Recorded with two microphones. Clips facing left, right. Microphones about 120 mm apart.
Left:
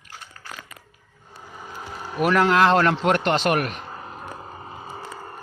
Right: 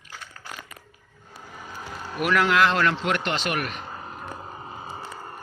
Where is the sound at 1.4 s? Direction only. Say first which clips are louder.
Left 1 dB; centre (ahead or behind).